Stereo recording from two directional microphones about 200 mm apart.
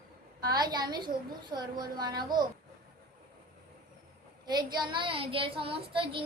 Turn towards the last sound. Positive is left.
turn(degrees=-25)  # may be behind; listen again after turning